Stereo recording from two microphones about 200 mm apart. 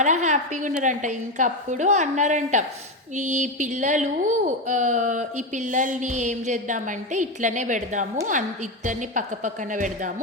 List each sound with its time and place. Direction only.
0.0 s a woman's voice: 35° right (ahead or behind)